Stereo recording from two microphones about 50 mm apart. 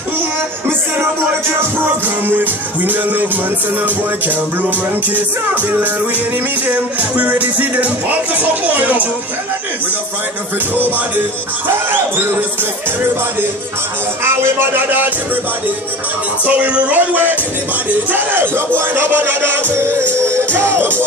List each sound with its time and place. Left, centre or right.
2.2 s music: right
11.6 s music: right
14.2 s speech: right
16.4 s music: right
18.1 s speech: right
20.3 s music: right